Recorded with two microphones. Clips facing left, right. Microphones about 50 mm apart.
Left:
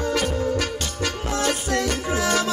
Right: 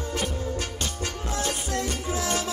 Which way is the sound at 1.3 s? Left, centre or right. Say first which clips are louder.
Left 6 dB; left.